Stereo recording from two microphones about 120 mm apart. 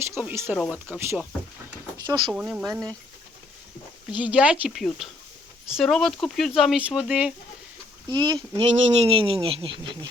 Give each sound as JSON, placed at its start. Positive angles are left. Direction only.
{"t": 0.2, "sound": "speech", "side_deg": -15}
{"t": 0.5, "sound": "speech", "side_deg": -5}
{"t": 0.9, "sound": "speech", "side_deg": -20}
{"t": 2.4, "sound": "speech", "side_deg": -10}
{"t": 4.1, "sound": "speech", "side_deg": -10}
{"t": 4.7, "sound": "speech", "side_deg": 0}
{"t": 8.1, "sound": "speech", "side_deg": -40}
{"t": 8.5, "sound": "speech", "side_deg": -55}